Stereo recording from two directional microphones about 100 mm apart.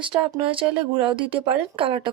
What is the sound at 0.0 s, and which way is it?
Speech, 55° right (ahead or behind).